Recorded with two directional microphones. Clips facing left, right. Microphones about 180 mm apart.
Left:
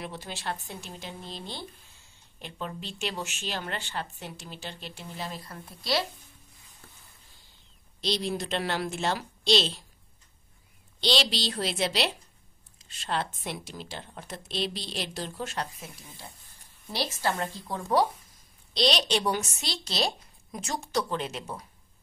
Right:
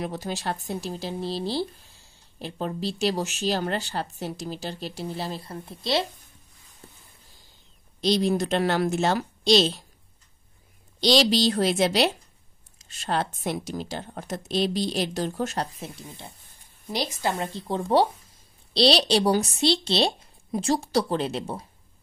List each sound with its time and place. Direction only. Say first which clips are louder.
0.0 s speech: right 7 dB; 40° right (ahead or behind); by 6.0 s 25° right (ahead or behind)
8.0 s speech: right 8 dB; 45° right (ahead or behind)
11.0 s speech: right 8 dB; 40° right (ahead or behind)